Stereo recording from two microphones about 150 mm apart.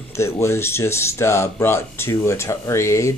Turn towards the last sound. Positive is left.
turn(degrees=20)  # may be behind; listen again after turning